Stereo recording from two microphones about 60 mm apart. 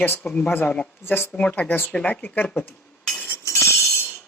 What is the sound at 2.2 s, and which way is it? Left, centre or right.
Speech, left.